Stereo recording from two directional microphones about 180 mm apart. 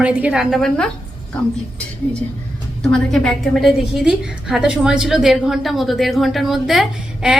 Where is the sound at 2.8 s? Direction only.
5° left (ahead or behind).